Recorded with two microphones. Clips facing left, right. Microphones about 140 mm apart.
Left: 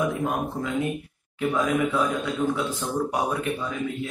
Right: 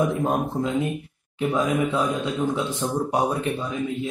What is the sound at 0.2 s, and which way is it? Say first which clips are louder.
Speech: right 4 dB; 30° right (ahead or behind).